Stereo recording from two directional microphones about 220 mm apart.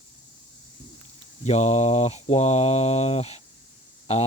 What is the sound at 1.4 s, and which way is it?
Speech, 30° left (ahead or behind).